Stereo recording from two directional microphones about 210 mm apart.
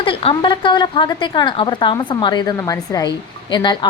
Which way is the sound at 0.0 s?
25° left (ahead or behind).